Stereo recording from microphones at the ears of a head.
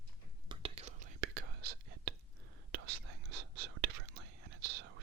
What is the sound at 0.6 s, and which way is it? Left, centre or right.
Whispering, right.